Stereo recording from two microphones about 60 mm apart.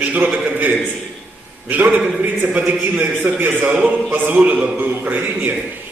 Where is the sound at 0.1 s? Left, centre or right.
Right.